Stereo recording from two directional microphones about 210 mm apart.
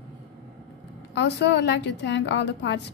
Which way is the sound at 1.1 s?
55° left (ahead or behind).